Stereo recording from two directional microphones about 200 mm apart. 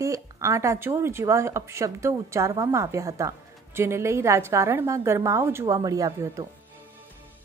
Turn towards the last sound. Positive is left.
turn(degrees=-15)  # may be behind; listen again after turning